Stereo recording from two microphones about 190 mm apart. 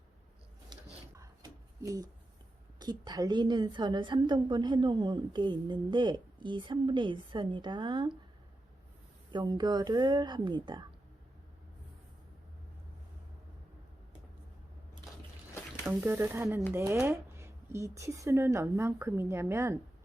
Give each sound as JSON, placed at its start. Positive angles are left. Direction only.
{"t": 0.7, "sound": "a sound", "side_deg": -15}
{"t": 1.8, "sound": "a woman's voice", "side_deg": -15}
{"t": 9.3, "sound": "a woman's voice", "side_deg": -20}
{"t": 15.9, "sound": "speech", "side_deg": -10}